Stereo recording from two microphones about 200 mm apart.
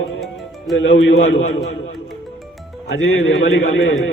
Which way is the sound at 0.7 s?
75° left (ahead or behind).